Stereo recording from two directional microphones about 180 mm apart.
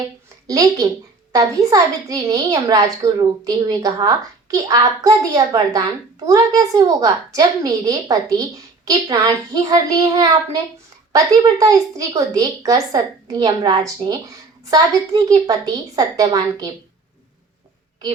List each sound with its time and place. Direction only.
0.4 s a woman's voice: 20° right (ahead or behind)